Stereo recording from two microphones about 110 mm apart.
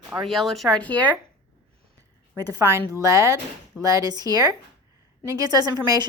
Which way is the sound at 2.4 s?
35° right (ahead or behind).